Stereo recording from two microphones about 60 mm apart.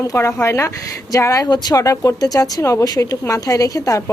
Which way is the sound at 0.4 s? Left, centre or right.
Left.